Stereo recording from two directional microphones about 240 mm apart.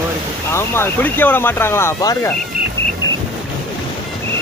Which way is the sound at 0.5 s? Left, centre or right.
Centre.